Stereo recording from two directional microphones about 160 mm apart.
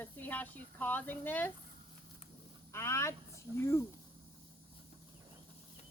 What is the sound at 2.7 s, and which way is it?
Vehicle, 15° left (ahead or behind).